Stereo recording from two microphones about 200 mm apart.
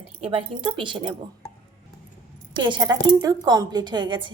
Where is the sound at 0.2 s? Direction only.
25° right (ahead or behind).